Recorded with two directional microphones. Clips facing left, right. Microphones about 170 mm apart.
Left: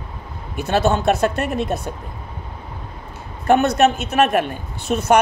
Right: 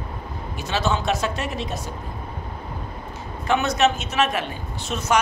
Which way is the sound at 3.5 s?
55° left (ahead or behind).